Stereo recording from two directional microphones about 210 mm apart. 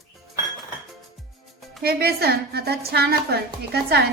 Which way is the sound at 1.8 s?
50° right (ahead or behind).